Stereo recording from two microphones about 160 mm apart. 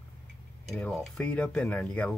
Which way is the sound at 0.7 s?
5° left (ahead or behind).